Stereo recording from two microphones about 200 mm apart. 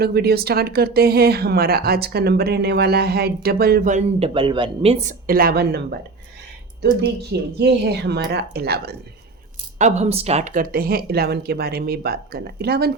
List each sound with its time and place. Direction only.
0.0 s speech: 50° right (ahead or behind)
4.4 s speech: 25° right (ahead or behind); by 9.0 s 50° right (ahead or behind)
9.7 s speech: 35° right (ahead or behind); by 12.9 s 50° right (ahead or behind)